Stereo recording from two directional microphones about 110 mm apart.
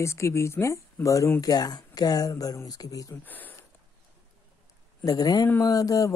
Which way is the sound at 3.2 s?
15° left (ahead or behind).